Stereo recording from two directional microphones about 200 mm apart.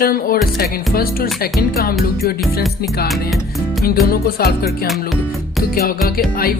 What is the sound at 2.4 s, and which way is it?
Music, centre (ahead or behind).